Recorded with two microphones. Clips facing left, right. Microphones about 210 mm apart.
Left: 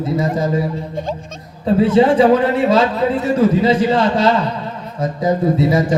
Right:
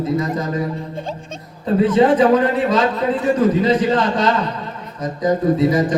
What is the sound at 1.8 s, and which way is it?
A man's voice, 30° left (ahead or behind).